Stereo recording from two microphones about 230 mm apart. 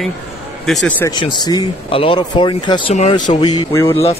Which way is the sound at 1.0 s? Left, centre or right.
Centre.